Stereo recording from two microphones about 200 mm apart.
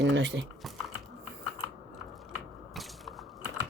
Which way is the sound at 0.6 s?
Centre (ahead or behind).